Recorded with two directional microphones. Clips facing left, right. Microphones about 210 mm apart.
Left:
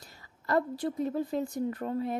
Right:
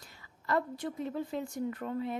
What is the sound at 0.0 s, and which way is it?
A woman's voice, 40° left (ahead or behind).